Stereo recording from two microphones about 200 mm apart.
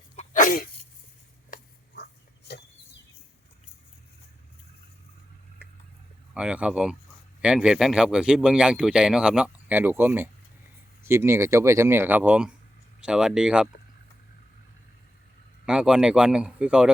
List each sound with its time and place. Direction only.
0.2 s sneeze: 40° left (ahead or behind)
1.5 s dog: 45° left (ahead or behind)
6.3 s speech: 5° right (ahead or behind)
15.6 s speech: 5° right (ahead or behind)